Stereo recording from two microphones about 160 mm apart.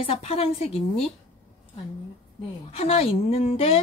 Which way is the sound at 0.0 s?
40° left (ahead or behind).